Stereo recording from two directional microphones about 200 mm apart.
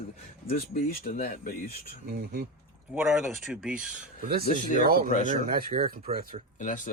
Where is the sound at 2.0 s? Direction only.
50° right (ahead or behind).